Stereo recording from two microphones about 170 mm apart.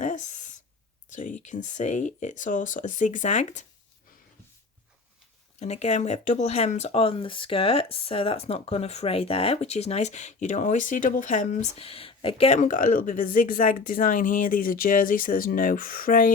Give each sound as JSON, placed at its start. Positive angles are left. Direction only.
{"t": 0.0, "sound": "a sound", "side_deg": 45}
{"t": 1.1, "sound": "speech", "side_deg": 50}
{"t": 5.5, "sound": "speech", "side_deg": 40}
{"t": 12.5, "sound": "speech", "side_deg": 50}